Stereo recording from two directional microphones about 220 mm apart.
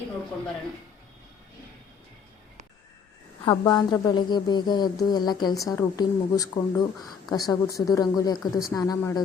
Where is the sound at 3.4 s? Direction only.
20° left (ahead or behind).